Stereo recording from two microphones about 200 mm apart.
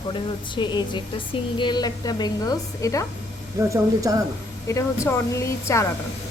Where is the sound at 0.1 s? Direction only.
25° left (ahead or behind).